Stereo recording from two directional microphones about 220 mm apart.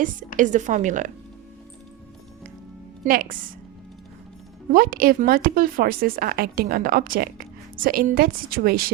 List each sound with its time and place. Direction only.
0.3 s speech: 35° right (ahead or behind)
3.0 s speech: 40° right (ahead or behind)
4.7 s speech: 40° right (ahead or behind)